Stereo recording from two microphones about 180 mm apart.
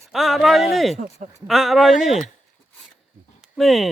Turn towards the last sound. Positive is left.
turn(degrees=0)  # may be behind; listen again after turning